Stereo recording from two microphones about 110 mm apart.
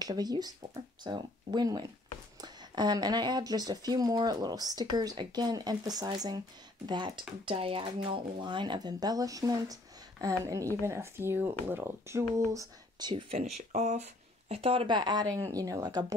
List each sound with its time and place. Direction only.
0.0 s speech: 35° right (ahead or behind)
7.5 s speech: 60° right (ahead or behind); by 13.1 s 30° right (ahead or behind)
13.1 s speech: 70° right (ahead or behind); by 14.0 s 90° right
14.5 s speech: 60° right (ahead or behind); by 15.2 s 45° right (ahead or behind)
15.3 s speech: 35° right (ahead or behind)